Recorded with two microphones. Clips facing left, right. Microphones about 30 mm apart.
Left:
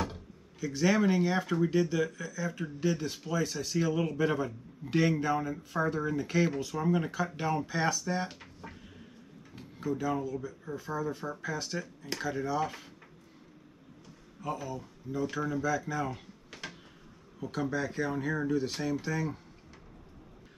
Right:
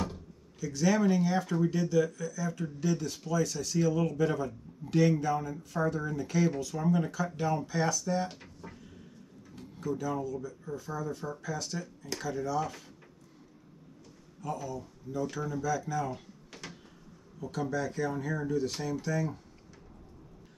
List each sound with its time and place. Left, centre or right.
0.0 s speech: left
14.4 s speech: left
17.4 s speech: left